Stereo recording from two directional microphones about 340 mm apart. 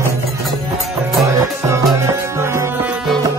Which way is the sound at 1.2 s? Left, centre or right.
Centre.